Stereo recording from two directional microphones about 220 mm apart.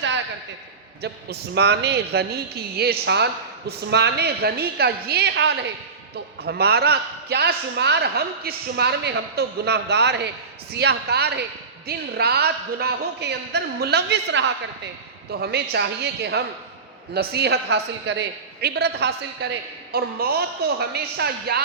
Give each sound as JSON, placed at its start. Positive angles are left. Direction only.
{"t": 1.0, "sound": "a man's voice", "side_deg": -50}